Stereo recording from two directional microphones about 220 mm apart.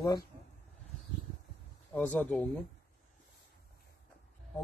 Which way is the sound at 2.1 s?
5° left (ahead or behind).